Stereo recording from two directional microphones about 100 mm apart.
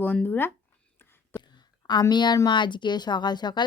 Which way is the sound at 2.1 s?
45° left (ahead or behind).